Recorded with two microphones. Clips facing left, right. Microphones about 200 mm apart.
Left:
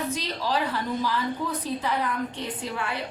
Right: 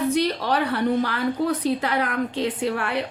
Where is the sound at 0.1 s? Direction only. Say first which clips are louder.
Right 6 dB; 65° right (ahead or behind).